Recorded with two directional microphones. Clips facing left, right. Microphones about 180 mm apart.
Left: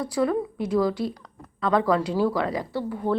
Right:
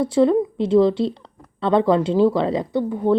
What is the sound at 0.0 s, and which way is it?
Speech, 25° right (ahead or behind).